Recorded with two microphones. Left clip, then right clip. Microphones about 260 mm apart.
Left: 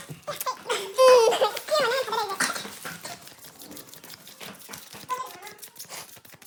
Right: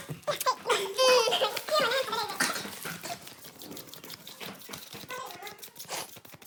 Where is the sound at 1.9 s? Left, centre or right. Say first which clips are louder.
Left 4 dB; left.